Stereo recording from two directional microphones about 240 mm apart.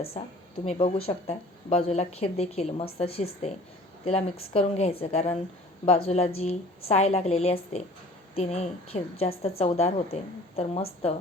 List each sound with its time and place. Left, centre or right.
0.6 s speech: left